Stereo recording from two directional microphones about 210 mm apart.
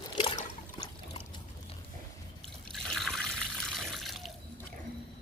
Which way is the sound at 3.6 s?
Centre (ahead or behind).